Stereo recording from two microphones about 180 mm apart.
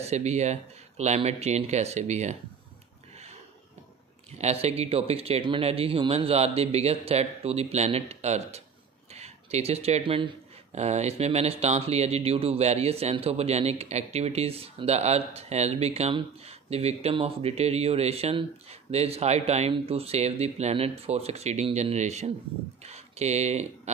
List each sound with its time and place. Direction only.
0.0 s speech: 40° right (ahead or behind)
4.4 s speech: 35° right (ahead or behind)